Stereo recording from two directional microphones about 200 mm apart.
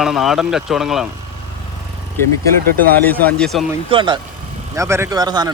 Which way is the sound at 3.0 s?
10° left (ahead or behind).